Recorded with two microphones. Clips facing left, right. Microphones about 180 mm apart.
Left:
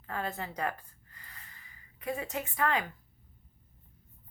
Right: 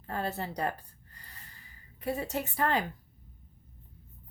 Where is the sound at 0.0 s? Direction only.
35° right (ahead or behind).